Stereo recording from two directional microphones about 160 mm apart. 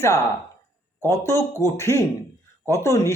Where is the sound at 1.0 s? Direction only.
15° left (ahead or behind).